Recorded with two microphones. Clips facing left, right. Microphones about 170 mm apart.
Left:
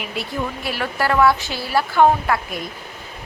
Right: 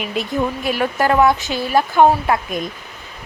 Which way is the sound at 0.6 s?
20° right (ahead or behind).